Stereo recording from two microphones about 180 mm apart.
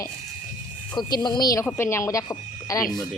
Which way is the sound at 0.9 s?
25° left (ahead or behind).